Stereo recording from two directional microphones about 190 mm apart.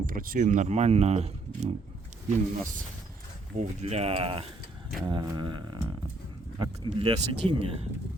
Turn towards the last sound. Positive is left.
turn(degrees=-25)  # may be behind; listen again after turning